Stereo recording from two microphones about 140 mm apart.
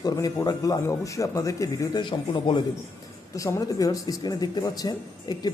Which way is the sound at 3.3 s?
25° left (ahead or behind).